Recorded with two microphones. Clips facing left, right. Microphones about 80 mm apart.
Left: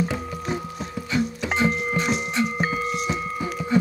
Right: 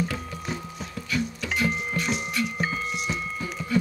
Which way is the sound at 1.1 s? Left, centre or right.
Left.